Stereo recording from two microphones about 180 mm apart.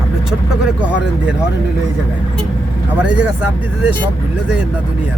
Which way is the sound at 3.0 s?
5° right (ahead or behind).